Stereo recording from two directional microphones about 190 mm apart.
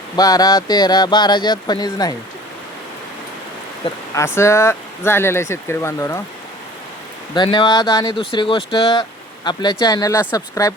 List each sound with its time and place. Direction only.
0.2 s speech: 20° left (ahead or behind)
4.1 s speech: 15° left (ahead or behind)
7.3 s speech: 25° left (ahead or behind)